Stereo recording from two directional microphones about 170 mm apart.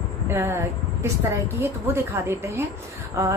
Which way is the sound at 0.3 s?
15° right (ahead or behind).